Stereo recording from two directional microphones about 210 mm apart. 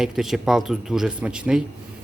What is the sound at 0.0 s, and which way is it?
Speech, centre (ahead or behind).